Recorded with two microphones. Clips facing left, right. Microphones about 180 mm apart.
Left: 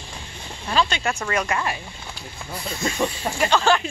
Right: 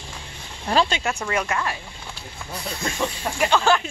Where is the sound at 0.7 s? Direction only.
35° right (ahead or behind).